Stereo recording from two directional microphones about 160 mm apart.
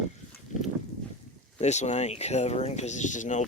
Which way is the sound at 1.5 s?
45° left (ahead or behind).